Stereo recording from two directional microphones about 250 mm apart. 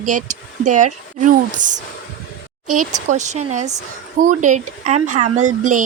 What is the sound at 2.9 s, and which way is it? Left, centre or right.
Speech, right.